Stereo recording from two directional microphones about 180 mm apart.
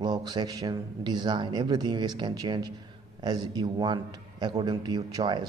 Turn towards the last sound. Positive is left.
turn(degrees=-25)  # may be behind; listen again after turning